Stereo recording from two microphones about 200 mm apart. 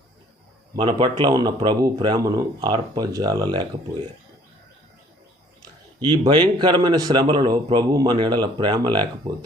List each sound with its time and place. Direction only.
0.8 s a man's voice: 25° right (ahead or behind)
5.6 s a man's voice: 20° right (ahead or behind)